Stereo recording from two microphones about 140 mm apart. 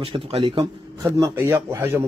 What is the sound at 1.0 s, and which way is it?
Speech, 20° right (ahead or behind).